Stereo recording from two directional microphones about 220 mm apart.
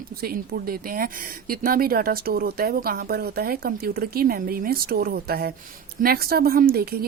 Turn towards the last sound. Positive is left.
turn(degrees=-45)  # may be behind; listen again after turning